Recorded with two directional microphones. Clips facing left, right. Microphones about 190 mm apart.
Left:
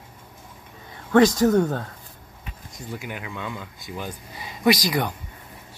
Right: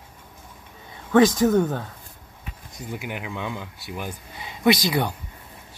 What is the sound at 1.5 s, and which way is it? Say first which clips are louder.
Speech: even; 5° right (ahead or behind).